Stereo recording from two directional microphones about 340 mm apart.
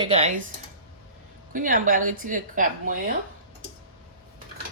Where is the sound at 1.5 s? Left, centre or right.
Right.